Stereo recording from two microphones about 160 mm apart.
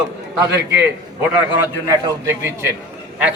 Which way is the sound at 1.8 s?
20° right (ahead or behind).